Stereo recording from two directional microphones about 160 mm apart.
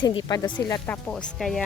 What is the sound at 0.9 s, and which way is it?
Speech, 5° left (ahead or behind).